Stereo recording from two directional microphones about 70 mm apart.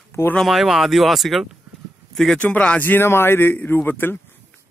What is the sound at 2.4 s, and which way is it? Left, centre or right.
Speech, centre.